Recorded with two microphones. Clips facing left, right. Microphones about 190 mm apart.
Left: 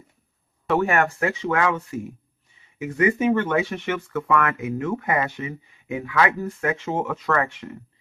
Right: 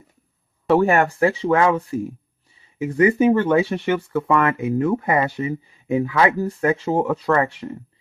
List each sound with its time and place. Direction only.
0.7 s speech: 30° right (ahead or behind)